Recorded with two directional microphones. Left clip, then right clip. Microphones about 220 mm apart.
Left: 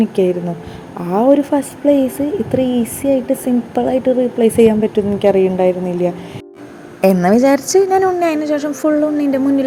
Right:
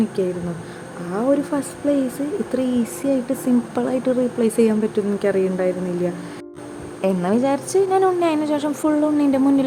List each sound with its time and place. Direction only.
0.2 s a woman's voice: 15° left (ahead or behind)